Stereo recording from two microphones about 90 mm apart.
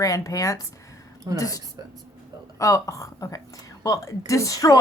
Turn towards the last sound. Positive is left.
turn(degrees=40)  # may be behind; listen again after turning